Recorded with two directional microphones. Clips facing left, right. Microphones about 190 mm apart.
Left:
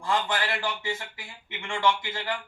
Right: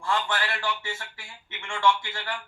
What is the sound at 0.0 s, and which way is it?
A man's voice, 15° left (ahead or behind).